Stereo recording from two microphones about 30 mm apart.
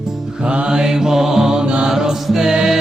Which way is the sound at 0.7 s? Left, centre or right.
Right.